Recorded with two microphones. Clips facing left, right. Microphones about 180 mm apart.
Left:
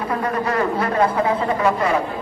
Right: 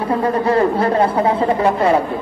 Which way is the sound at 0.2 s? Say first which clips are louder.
Right 7 dB; 30° right (ahead or behind).